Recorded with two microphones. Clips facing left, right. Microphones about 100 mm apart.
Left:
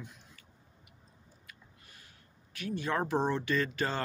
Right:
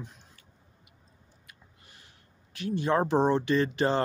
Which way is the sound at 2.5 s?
25° right (ahead or behind).